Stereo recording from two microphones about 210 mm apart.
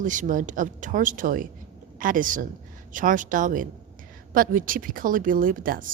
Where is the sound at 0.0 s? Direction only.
40° right (ahead or behind).